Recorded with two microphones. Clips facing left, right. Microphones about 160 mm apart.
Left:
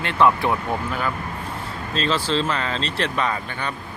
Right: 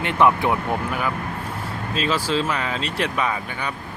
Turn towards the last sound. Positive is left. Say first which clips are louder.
# even
turn(degrees=-10)  # may be behind; listen again after turning